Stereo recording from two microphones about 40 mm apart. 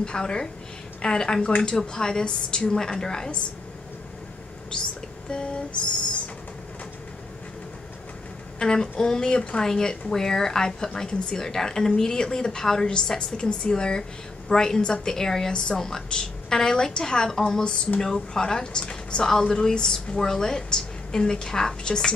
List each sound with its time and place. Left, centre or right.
0.0 s a woman's voice: left
5.3 s a woman's voice: left
8.5 s a woman's voice: centre